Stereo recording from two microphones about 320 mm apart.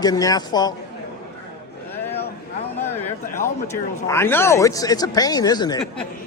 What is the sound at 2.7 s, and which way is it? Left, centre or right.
Speech, centre.